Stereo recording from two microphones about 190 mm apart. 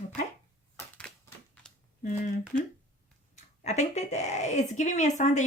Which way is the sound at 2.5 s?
40° left (ahead or behind).